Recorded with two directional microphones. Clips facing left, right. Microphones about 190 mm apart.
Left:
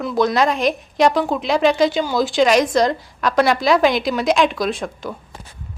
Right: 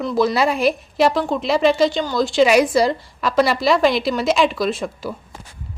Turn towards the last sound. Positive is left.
turn(degrees=-5)  # may be behind; listen again after turning